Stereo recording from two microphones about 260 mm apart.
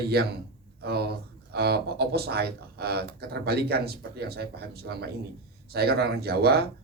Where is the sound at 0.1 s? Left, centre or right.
Right.